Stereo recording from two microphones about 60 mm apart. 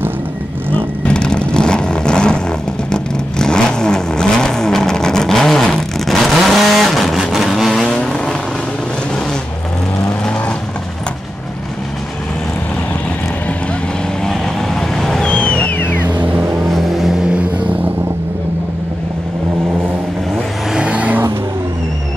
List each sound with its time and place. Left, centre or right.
0.7 s vehicle: centre
7.8 s vehicle: centre
14.2 s vehicle: centre
15.2 s a sound: centre
17.4 s vehicle: right
20.7 s vehicle: centre